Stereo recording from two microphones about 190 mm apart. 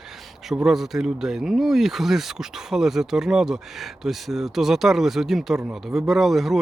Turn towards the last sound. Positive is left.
turn(degrees=0)  # may be behind; listen again after turning